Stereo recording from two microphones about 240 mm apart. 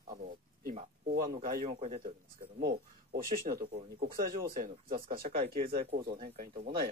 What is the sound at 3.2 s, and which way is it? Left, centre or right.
Speech, right.